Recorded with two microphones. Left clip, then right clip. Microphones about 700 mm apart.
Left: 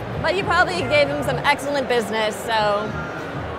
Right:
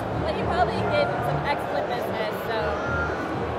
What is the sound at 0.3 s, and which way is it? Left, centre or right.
Speech, left.